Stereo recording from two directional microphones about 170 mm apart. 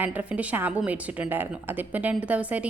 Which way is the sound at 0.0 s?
10° right (ahead or behind).